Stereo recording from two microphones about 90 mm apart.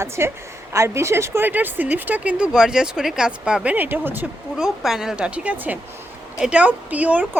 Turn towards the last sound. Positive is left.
turn(degrees=-15)  # may be behind; listen again after turning